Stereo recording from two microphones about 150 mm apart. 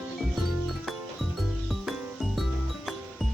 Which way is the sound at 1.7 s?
Centre (ahead or behind).